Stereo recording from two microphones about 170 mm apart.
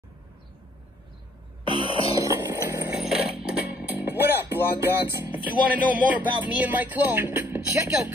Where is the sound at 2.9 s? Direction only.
5° right (ahead or behind).